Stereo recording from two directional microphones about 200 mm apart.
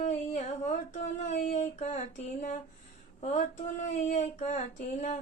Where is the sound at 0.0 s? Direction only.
35° left (ahead or behind).